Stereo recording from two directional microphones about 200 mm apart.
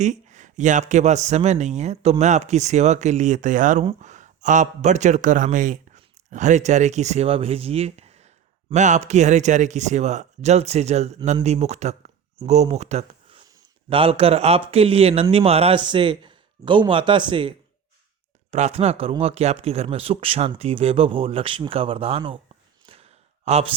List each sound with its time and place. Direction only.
0.0 s a man's voice: 35° right (ahead or behind)
18.5 s speech: 35° right (ahead or behind)
22.9 s a sound: 30° right (ahead or behind)